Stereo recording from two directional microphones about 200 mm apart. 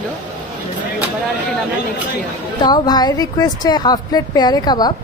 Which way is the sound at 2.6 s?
20° left (ahead or behind).